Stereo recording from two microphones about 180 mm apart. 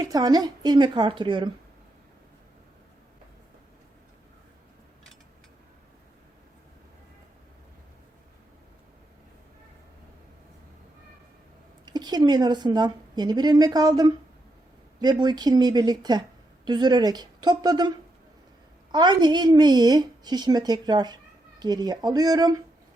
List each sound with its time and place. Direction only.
0.0 s a woman's voice: 20° right (ahead or behind)
11.9 s a woman's voice: 20° right (ahead or behind)